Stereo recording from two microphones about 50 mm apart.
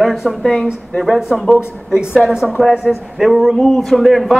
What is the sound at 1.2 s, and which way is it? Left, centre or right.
A woman's voice, centre.